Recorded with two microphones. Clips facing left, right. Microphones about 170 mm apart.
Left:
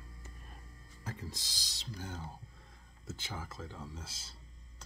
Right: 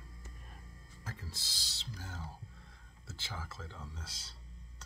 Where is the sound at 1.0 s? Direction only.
15° left (ahead or behind).